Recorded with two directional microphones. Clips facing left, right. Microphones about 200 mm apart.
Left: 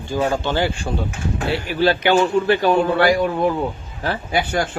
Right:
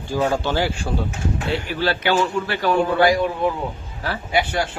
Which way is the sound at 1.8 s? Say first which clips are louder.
Left 5 dB; 15° left (ahead or behind).